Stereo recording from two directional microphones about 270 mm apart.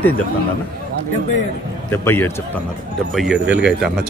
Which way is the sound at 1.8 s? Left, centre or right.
Centre.